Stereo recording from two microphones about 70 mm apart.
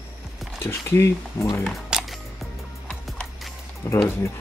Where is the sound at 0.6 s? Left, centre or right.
Left.